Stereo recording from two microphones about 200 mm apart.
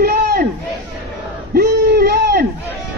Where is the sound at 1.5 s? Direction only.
50° right (ahead or behind).